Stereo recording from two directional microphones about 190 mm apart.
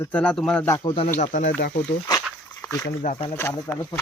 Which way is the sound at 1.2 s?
40° left (ahead or behind).